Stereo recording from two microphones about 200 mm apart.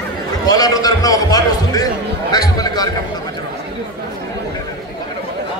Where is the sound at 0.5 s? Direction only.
20° left (ahead or behind).